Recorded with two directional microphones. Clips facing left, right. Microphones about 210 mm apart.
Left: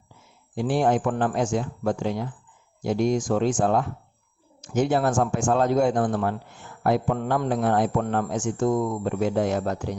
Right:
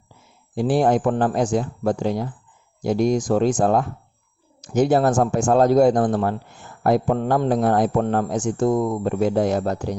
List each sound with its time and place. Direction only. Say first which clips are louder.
0.5 s a man's voice: right 4 dB; 35° right (ahead or behind)